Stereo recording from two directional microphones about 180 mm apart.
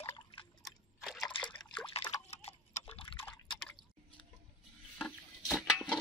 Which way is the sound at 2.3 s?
35° left (ahead or behind).